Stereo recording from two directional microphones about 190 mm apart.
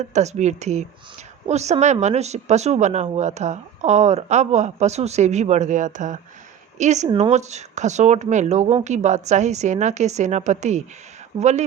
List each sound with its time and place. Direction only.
0.0 s speech: 35° right (ahead or behind)